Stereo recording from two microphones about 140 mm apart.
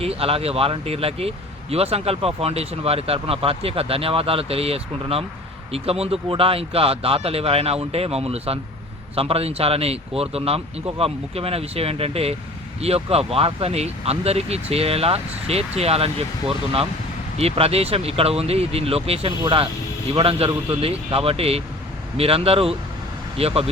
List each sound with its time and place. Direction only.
0.0 s speech: 45° right (ahead or behind)
17.3 s speech: 45° right (ahead or behind)